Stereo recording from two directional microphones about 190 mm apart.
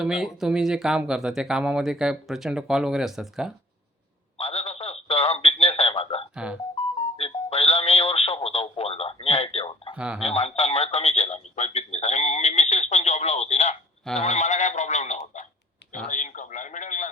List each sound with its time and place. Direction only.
0.0 s speech: centre (ahead or behind)
4.4 s radio: 30° left (ahead or behind)
6.3 s speech: 5° right (ahead or behind)
7.2 s telephone: 30° left (ahead or behind)
9.9 s speech: 5° right (ahead or behind)
10.2 s radio: 35° left (ahead or behind)
14.2 s sheep: 35° left (ahead or behind)
16.0 s a sound: 40° left (ahead or behind)